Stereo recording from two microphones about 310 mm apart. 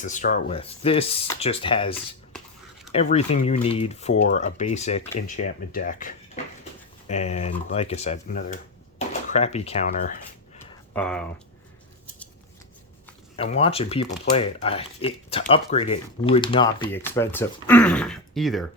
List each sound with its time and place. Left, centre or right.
0.0 s speech: left
10.9 s speech: centre
13.3 s speech: centre